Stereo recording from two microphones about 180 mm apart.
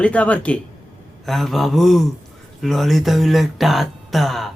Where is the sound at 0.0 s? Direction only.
5° left (ahead or behind).